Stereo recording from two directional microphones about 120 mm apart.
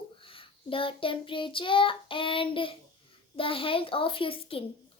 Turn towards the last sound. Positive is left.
turn(degrees=50)  # may be behind; listen again after turning